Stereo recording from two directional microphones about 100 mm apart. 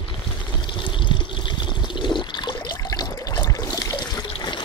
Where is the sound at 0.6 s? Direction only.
50° left (ahead or behind).